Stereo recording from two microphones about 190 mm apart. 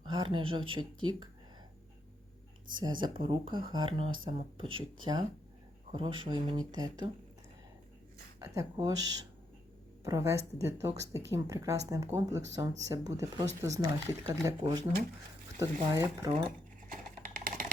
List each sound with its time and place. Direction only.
0.0 s speech: 25° right (ahead or behind)
2.7 s speech: 25° right (ahead or behind)
8.4 s speech: 15° right (ahead or behind)
16.9 s typing: 45° right (ahead or behind)